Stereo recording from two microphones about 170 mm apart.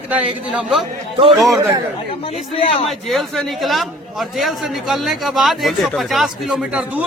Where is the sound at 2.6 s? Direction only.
35° left (ahead or behind).